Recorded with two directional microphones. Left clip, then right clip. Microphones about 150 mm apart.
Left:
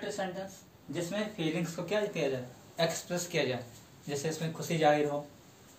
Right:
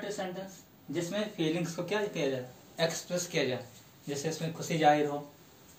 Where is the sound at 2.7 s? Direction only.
15° left (ahead or behind).